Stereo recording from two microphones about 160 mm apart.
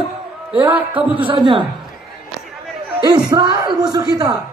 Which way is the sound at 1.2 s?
30° right (ahead or behind).